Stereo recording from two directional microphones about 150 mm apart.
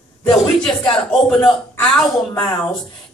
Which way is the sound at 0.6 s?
5° left (ahead or behind).